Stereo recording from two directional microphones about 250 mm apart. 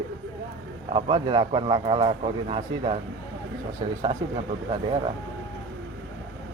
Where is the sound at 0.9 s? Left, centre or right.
Right.